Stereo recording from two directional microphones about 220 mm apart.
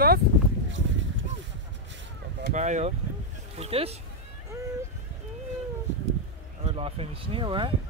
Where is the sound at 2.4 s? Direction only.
35° right (ahead or behind).